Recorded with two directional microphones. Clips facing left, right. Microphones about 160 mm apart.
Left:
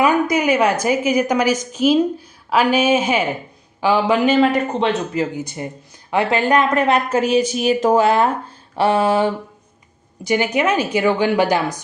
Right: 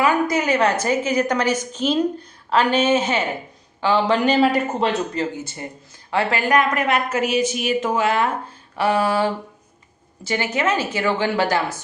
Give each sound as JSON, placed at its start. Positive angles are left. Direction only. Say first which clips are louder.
{"t": 0.0, "sound": "a woman's voice", "louder": "left 3 dB", "side_deg": 15}
{"t": 4.4, "sound": "speech", "louder": "left 2 dB", "side_deg": -5}
{"t": 5.2, "sound": "a woman's voice", "louder": "left 3 dB", "side_deg": 15}
{"t": 6.5, "sound": "a woman's voice", "louder": "left 3 dB", "side_deg": 30}
{"t": 8.8, "sound": "a sound", "louder": "left 3 dB", "side_deg": 25}
{"t": 10.2, "sound": "a woman's voice", "louder": "left 4 dB", "side_deg": 15}